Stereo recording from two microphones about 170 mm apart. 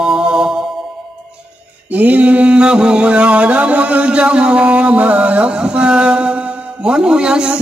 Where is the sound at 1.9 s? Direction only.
10° right (ahead or behind).